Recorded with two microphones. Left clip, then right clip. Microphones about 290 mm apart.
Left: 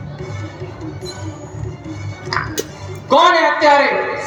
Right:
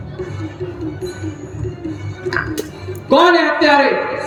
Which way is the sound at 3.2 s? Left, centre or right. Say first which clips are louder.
Even; right.